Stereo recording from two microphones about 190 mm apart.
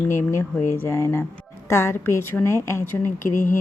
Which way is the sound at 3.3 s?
45° left (ahead or behind).